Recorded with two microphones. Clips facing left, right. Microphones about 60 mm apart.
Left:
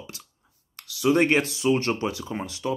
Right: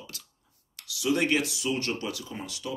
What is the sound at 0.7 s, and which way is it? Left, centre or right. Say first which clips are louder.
Speech: left 6 dB; left.